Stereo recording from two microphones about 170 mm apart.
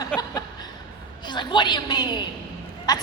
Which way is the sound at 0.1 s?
5° left (ahead or behind).